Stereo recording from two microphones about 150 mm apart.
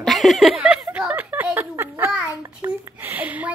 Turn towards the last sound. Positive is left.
turn(degrees=-10)  # may be behind; listen again after turning